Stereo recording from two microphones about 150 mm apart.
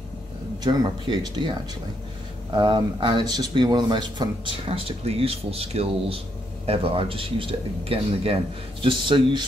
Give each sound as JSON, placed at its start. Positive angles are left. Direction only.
{"t": 0.7, "sound": "speech", "side_deg": -30}